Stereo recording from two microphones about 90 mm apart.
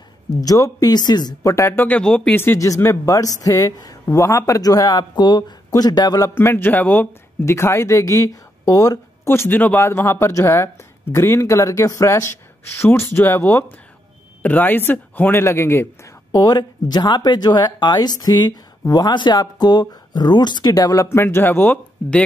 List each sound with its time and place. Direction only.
0.4 s speech: 40° left (ahead or behind)
1.4 s speech: 35° left (ahead or behind)
1.8 s speech: 15° left (ahead or behind)
2.3 s speech: 25° left (ahead or behind); by 6.3 s 45° left (ahead or behind)
6.3 s speech: 25° left (ahead or behind)
7.4 s speech: 30° left (ahead or behind)
9.3 s speech: 25° left (ahead or behind)
16.3 s speech: 45° left (ahead or behind); by 21.7 s 25° left (ahead or behind)